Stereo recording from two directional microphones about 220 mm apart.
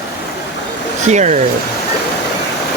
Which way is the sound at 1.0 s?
35° right (ahead or behind).